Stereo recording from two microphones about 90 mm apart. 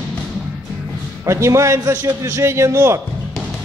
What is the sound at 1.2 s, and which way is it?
A man's voice, 30° right (ahead or behind).